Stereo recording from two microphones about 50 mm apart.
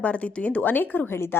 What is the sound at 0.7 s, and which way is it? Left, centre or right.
Speech, left.